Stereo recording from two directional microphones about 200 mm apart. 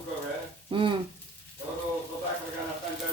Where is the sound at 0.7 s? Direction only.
25° right (ahead or behind).